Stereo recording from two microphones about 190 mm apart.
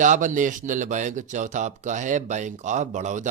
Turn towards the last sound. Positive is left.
turn(degrees=-40)  # may be behind; listen again after turning